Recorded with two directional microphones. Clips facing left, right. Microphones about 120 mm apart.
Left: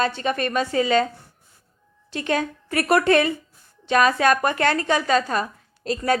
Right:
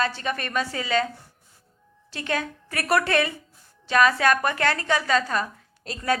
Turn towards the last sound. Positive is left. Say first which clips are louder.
# left 4 dB
turn(degrees=25)  # may be behind; listen again after turning